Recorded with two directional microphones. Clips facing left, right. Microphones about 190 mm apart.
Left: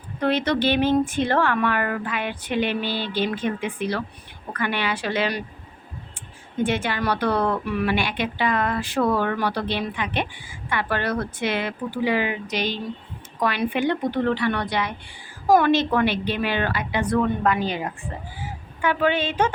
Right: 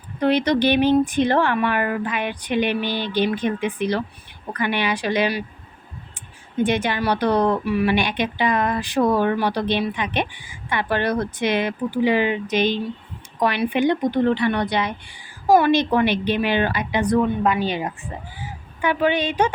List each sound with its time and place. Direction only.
0.2 s a woman's voice: 15° right (ahead or behind)
6.6 s a woman's voice: 20° right (ahead or behind)